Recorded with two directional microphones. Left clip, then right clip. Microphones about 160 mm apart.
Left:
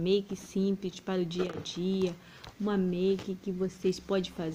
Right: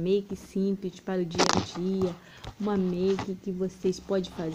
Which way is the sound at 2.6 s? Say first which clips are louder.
Right 2 dB; 15° left (ahead or behind).